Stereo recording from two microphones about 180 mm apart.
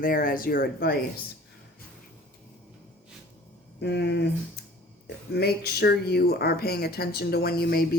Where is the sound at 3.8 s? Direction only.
70° left (ahead or behind).